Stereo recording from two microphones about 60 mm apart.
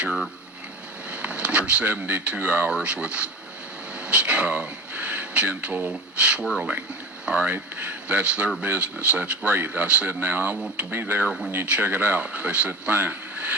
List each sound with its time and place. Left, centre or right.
0.0 s speech: centre
11.3 s speech: centre
11.6 s speech: right